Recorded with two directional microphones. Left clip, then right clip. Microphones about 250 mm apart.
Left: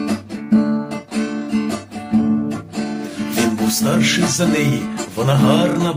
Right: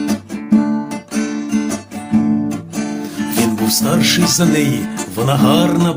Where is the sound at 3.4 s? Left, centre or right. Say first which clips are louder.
Right 2 dB; right.